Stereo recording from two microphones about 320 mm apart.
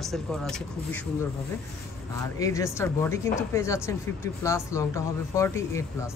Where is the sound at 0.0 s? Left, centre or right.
Centre.